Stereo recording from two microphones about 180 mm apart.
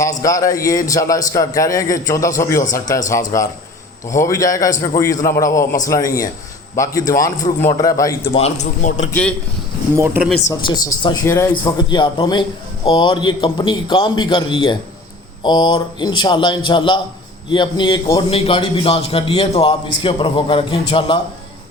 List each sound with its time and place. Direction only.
0.0 s a man's voice: 20° left (ahead or behind)
8.2 s a man's voice: 35° left (ahead or behind)
9.9 s speech: 10° right (ahead or behind)
10.5 s a man's voice: 20° left (ahead or behind)